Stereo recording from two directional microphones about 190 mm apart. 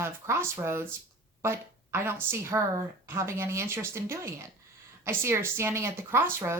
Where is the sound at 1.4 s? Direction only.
15° right (ahead or behind).